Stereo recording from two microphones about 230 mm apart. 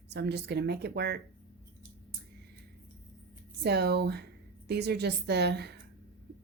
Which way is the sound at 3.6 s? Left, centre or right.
Right.